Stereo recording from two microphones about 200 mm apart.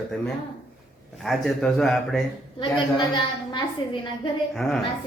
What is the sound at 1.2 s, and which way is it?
A woman's voice, centre (ahead or behind).